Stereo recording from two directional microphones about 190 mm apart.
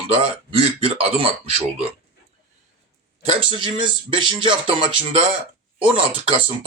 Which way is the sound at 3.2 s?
30° right (ahead or behind).